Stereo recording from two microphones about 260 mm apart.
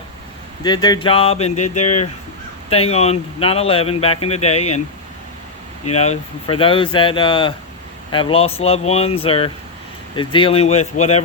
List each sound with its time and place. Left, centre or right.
0.6 s speech: centre
5.9 s speech: left